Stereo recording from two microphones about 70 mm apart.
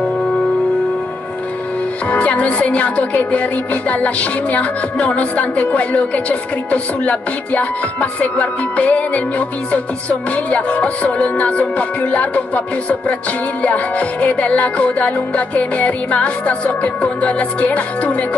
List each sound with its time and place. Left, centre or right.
2.0 s music: centre